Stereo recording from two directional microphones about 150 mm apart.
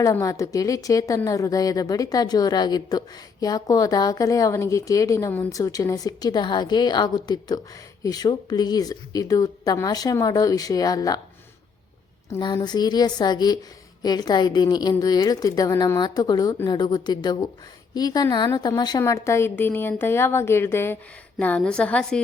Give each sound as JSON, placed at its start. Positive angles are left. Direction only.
{"t": 0.0, "sound": "a woman's voice", "side_deg": 20}
{"t": 12.6, "sound": "a woman's voice", "side_deg": 30}